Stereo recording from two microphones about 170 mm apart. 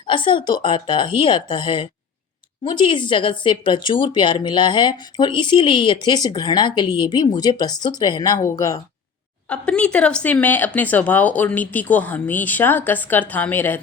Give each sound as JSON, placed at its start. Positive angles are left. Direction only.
{"t": 0.1, "sound": "speech", "side_deg": 30}
{"t": 9.5, "sound": "speech", "side_deg": 5}